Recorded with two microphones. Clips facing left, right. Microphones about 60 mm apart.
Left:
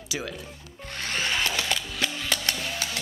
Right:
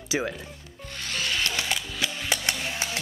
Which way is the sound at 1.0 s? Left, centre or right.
Left.